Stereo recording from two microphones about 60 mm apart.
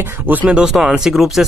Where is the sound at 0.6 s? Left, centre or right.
Centre.